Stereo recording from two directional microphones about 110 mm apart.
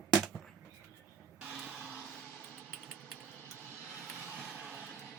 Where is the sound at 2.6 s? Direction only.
10° right (ahead or behind).